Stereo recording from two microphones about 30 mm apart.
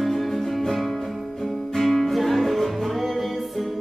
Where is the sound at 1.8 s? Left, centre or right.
Centre.